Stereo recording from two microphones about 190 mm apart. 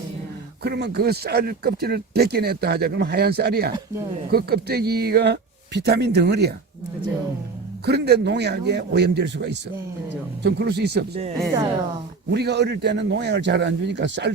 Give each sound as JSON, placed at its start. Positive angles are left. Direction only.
{"t": 0.6, "sound": "speech", "side_deg": -60}
{"t": 7.9, "sound": "speech", "side_deg": -60}
{"t": 12.3, "sound": "speech", "side_deg": -60}